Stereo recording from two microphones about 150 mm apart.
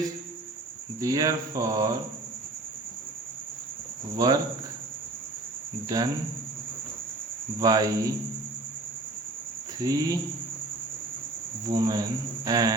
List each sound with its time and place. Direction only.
0.9 s speech: 20° right (ahead or behind)
4.2 s speech: 25° right (ahead or behind)
5.9 s speech: 25° right (ahead or behind)
7.6 s speech: 25° right (ahead or behind)
9.8 s speech: 25° right (ahead or behind)
11.7 s speech: 25° right (ahead or behind)